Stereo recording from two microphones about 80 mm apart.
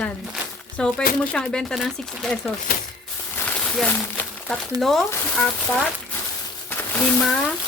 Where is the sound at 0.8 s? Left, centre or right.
Centre.